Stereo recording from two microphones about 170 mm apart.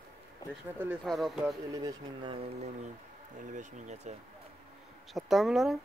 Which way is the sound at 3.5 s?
45° right (ahead or behind).